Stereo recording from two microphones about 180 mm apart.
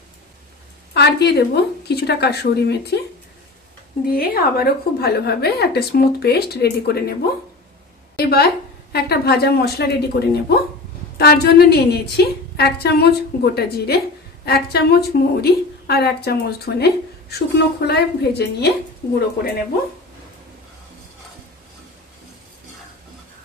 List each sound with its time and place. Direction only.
0.9 s a woman's voice: 65° left (ahead or behind)
4.0 s a woman's voice: 55° left (ahead or behind)
8.2 s a woman's voice: 60° left (ahead or behind)